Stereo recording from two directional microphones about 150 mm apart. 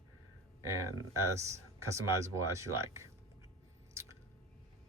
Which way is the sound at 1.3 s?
20° right (ahead or behind).